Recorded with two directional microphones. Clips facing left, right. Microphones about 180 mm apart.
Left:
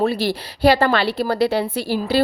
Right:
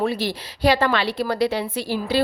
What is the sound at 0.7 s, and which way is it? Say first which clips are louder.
Speech: left 3 dB; 35° left (ahead or behind).